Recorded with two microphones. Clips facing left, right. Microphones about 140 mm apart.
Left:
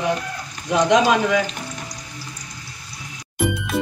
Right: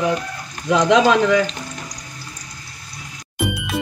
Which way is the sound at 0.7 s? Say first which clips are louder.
Right 2 dB; 90° right.